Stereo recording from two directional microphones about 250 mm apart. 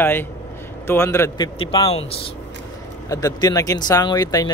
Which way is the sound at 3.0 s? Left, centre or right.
Centre.